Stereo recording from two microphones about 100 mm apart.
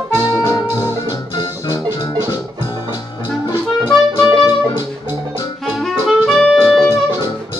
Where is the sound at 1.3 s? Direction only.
45° left (ahead or behind).